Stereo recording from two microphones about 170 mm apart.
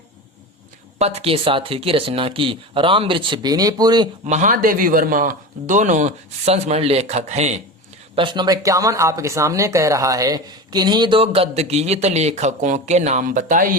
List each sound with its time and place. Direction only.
0.9 s speech: 35° right (ahead or behind)
4.3 s speech: 45° right (ahead or behind)
8.1 s speech: 30° right (ahead or behind); by 13.7 s 50° right (ahead or behind)